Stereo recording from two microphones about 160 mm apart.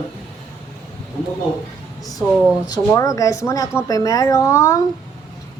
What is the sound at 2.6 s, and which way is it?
Speech, 25° left (ahead or behind).